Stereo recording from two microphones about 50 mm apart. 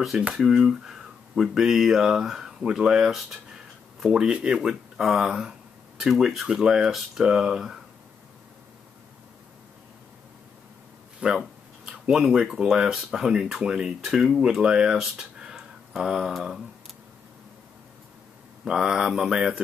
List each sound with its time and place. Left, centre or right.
0.3 s speech: centre
5.2 s speech: centre
6.9 s speech: centre
7.2 s speech: centre
11.2 s speech: centre
18.6 s speech: centre